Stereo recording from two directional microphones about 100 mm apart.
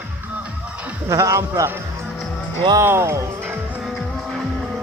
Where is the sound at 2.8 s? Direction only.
25° right (ahead or behind).